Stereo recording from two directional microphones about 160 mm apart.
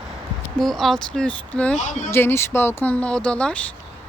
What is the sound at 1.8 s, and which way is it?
Speech, 50° left (ahead or behind).